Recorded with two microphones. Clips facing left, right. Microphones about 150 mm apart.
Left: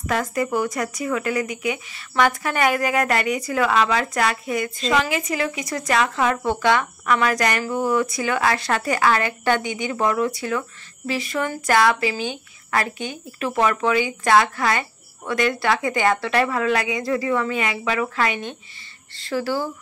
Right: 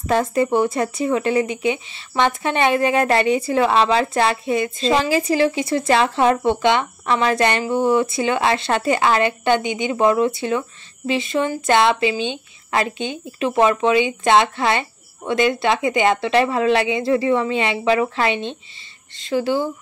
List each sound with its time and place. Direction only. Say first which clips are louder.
0.0 s a woman's voice: right 5 dB; 25° right (ahead or behind)